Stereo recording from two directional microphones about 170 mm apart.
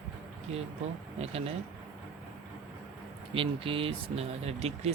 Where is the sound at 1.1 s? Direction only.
35° right (ahead or behind).